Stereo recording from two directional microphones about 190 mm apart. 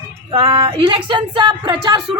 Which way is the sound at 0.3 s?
25° right (ahead or behind).